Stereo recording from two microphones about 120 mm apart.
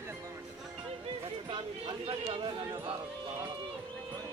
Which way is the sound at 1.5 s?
45° right (ahead or behind).